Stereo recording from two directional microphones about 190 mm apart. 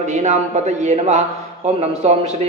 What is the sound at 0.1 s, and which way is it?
Speech, 40° right (ahead or behind).